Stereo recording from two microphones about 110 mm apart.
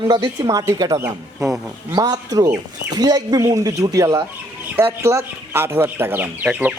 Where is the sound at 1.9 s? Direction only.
35° right (ahead or behind).